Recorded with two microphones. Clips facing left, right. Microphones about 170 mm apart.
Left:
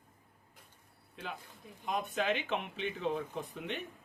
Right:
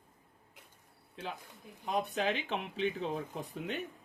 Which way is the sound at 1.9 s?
35° right (ahead or behind).